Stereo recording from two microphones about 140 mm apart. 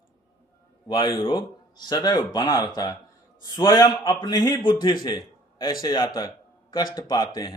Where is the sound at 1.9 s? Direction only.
30° left (ahead or behind).